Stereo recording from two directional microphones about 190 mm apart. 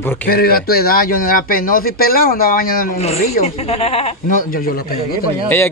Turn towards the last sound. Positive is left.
turn(degrees=10)  # may be behind; listen again after turning